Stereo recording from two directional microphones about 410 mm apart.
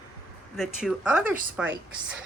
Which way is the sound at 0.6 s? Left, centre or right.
Centre.